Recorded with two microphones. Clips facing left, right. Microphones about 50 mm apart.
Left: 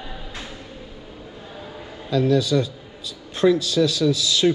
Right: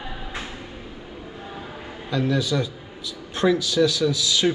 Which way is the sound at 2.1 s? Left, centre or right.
Centre.